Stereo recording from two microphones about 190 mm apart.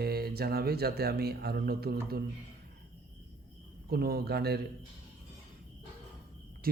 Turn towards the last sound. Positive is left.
turn(degrees=-50)  # may be behind; listen again after turning